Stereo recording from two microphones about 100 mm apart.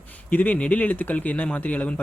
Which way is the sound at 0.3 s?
15° left (ahead or behind).